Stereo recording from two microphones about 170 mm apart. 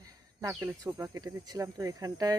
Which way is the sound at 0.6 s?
15° right (ahead or behind).